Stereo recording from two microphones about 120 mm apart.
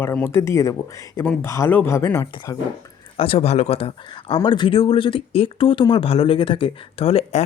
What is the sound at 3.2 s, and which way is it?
Speech, 55° left (ahead or behind).